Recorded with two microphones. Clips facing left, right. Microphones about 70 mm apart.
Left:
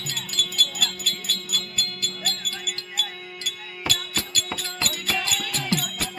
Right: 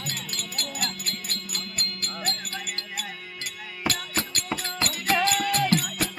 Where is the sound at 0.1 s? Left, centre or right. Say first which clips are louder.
Left 4 dB; right.